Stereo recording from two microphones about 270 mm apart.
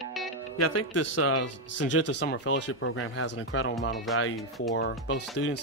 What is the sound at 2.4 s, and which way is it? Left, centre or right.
Speech, left.